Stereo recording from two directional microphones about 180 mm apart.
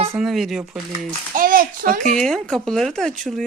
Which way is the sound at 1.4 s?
50° right (ahead or behind).